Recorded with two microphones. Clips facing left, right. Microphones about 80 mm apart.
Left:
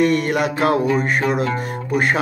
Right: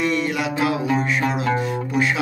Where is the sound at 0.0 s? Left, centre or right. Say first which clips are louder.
Left 5 dB; left.